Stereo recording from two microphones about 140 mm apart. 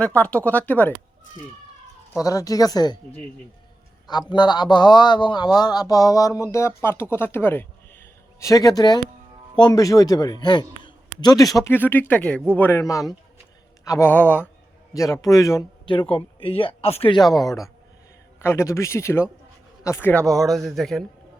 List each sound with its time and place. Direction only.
0.0 s speech: 10° left (ahead or behind)
2.2 s speech: 25° left (ahead or behind)
4.3 s speech: 30° left (ahead or behind)
14.1 s speech: 10° left (ahead or behind)
14.9 s speech: 25° left (ahead or behind)
15.9 s speech: 40° left (ahead or behind)
17.2 s a man's voice: 30° left (ahead or behind); by 21.0 s centre (ahead or behind)